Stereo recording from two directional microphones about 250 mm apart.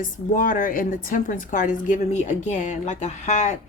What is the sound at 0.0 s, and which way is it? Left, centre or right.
A woman's voice, left.